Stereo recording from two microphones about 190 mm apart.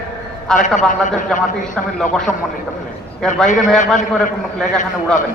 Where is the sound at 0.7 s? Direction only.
40° left (ahead or behind).